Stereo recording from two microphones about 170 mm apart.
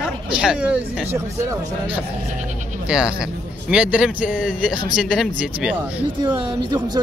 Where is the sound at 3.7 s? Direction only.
5° right (ahead or behind).